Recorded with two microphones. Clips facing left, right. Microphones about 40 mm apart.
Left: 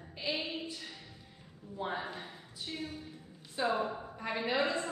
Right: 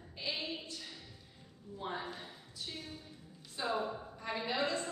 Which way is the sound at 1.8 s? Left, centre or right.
Centre.